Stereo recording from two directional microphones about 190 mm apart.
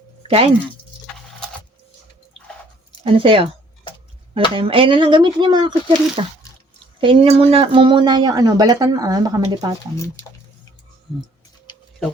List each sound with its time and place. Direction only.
0.2 s a sound: 30° right (ahead or behind)
3.0 s speech: 30° right (ahead or behind)
4.5 s speech: 30° right (ahead or behind)